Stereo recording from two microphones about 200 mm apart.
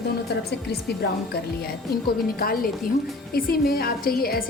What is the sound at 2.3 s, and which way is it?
A woman's voice, 45° left (ahead or behind).